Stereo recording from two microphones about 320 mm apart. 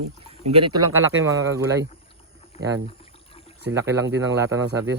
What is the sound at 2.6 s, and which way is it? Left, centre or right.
Speech, right.